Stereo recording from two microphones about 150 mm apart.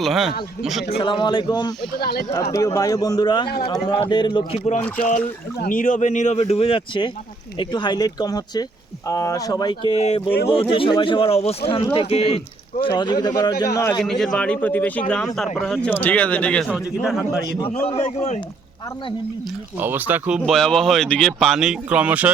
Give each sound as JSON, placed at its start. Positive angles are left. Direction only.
{"t": 0.0, "sound": "speech", "side_deg": 0}
{"t": 1.0, "sound": "speech", "side_deg": 35}
{"t": 2.0, "sound": "speech", "side_deg": 90}
{"t": 2.5, "sound": "speech", "side_deg": 25}
{"t": 4.5, "sound": "speech", "side_deg": 50}
{"t": 4.9, "sound": "speech", "side_deg": 60}
{"t": 14.0, "sound": "speech", "side_deg": 5}
{"t": 17.8, "sound": "speech", "side_deg": 45}
{"t": 19.7, "sound": "speech", "side_deg": -10}
{"t": 20.4, "sound": "speech", "side_deg": 5}